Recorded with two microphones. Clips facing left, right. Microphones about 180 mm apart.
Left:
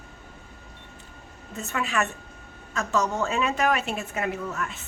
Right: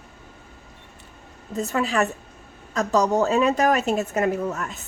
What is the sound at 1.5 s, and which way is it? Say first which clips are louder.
A woman's voice: right 5 dB; 35° right (ahead or behind).